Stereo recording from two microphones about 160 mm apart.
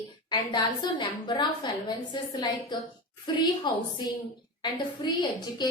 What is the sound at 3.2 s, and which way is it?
A woman's voice, 25° left (ahead or behind).